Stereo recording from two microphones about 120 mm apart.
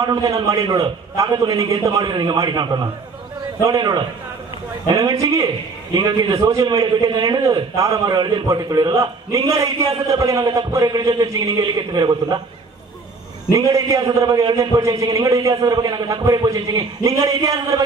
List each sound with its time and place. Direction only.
0.0 s a man's voice: 30° right (ahead or behind)
6.5 s a man's voice: 30° right (ahead or behind)
13.5 s a man's voice: 25° right (ahead or behind)